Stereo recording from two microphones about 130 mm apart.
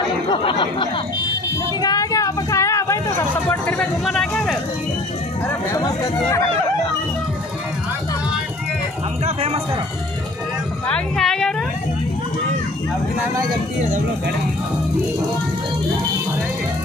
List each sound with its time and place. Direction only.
0.3 s a sound: 40° left (ahead or behind)
1.8 s speech: 30° left (ahead or behind); by 4.6 s 5° left (ahead or behind)
9.2 s speech: 55° right (ahead or behind)
10.9 s speech: 5° left (ahead or behind)